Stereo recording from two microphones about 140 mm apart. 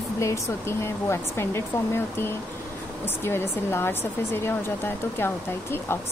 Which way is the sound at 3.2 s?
15° left (ahead or behind).